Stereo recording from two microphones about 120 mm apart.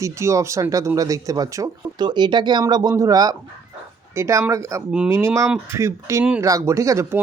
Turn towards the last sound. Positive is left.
turn(degrees=-25)  # may be behind; listen again after turning